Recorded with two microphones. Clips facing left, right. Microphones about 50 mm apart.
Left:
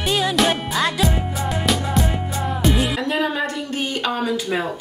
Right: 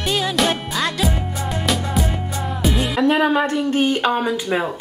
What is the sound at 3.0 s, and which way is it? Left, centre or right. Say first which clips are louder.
Speech: right 5 dB; right.